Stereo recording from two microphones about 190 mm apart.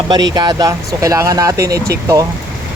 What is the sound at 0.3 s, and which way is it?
Speech, 20° right (ahead or behind).